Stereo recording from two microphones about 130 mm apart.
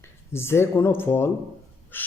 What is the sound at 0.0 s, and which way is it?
A man's voice, 20° left (ahead or behind).